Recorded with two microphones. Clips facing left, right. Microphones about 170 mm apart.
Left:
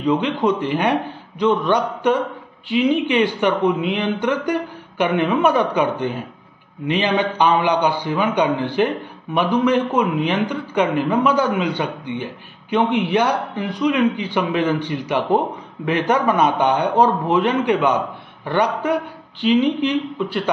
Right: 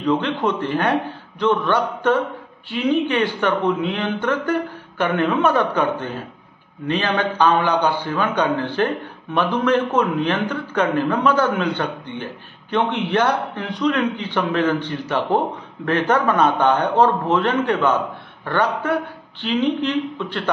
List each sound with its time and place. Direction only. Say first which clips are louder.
0.0 s a man's voice: left 2 dB; 15° left (ahead or behind)